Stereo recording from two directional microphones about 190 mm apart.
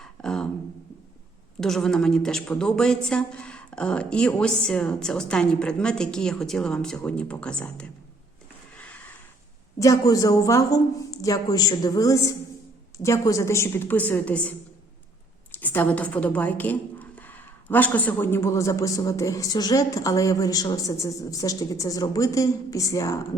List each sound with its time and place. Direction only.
0.0 s a sound: 5° left (ahead or behind)
1.6 s a woman's voice: centre (ahead or behind)
9.7 s a woman's voice: 15° left (ahead or behind)
15.5 s a woman's voice: 10° left (ahead or behind)